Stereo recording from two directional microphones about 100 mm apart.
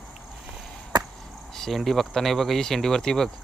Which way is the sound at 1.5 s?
5° left (ahead or behind).